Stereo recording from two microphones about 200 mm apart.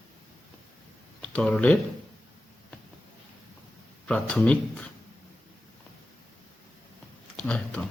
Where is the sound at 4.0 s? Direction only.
5° left (ahead or behind).